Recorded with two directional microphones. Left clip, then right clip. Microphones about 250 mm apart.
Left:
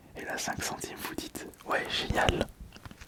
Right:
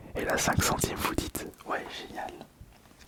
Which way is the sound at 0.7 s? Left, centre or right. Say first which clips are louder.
Right 8 dB; right.